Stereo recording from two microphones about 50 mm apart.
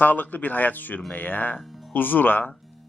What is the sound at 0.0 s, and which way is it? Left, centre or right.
Speech, left.